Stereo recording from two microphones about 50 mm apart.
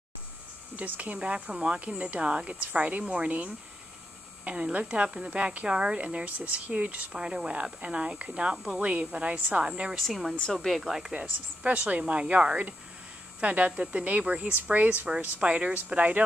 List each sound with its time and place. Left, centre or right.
0.7 s speech: right
1.2 s speech: centre
7.1 s speech: centre; by 9.7 s right
9.7 s speech: centre
9.9 s speech: centre
10.8 s speech: centre
11.6 s speech: right